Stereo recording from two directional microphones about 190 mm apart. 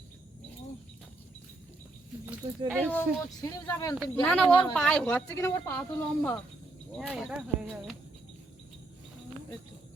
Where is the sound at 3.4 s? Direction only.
20° left (ahead or behind).